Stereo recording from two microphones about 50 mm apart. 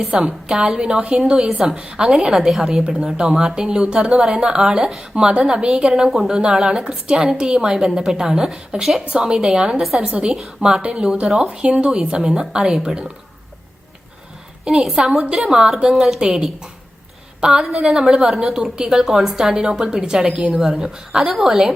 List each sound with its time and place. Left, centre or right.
0.1 s a woman's voice: centre
14.6 s a woman's voice: centre
21.2 s a woman's voice: centre